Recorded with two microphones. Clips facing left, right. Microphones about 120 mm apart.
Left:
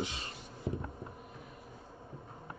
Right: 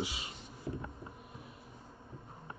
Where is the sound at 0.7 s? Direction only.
20° left (ahead or behind).